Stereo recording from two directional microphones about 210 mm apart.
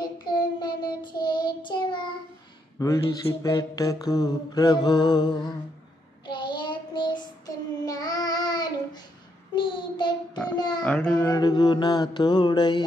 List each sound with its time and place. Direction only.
0.0 s child singing: 20° left (ahead or behind)
2.8 s mantra: 15° left (ahead or behind)
6.2 s child singing: 20° left (ahead or behind)
10.5 s a sound: 20° left (ahead or behind)
10.8 s mantra: 5° left (ahead or behind); by 12.8 s 20° left (ahead or behind)